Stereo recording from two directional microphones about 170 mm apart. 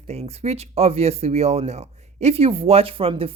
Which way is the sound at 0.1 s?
40° right (ahead or behind).